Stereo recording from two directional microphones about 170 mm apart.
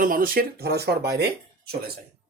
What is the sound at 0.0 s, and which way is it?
Speech, 55° right (ahead or behind).